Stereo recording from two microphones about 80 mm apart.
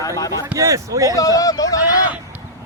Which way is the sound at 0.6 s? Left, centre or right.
Right.